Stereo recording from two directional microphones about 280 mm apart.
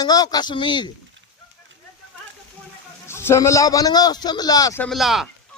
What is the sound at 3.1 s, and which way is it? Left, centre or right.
A man's voice, centre.